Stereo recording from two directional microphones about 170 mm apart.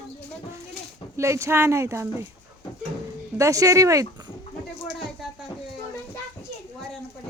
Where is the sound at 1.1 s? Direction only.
15° right (ahead or behind).